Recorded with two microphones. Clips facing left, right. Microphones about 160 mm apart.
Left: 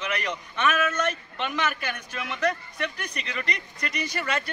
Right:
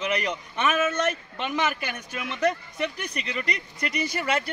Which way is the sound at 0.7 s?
25° right (ahead or behind).